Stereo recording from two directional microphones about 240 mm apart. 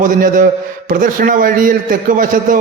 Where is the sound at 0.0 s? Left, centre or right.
Right.